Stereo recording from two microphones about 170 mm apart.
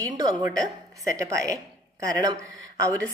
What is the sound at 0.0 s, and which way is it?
A woman's voice, 20° right (ahead or behind).